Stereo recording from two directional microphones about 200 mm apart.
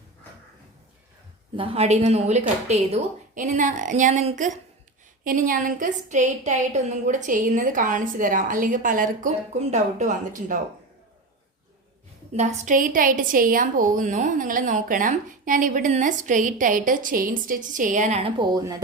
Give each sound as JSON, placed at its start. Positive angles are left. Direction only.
{"t": 1.5, "sound": "a woman's voice", "side_deg": -30}
{"t": 12.3, "sound": "a woman's voice", "side_deg": -35}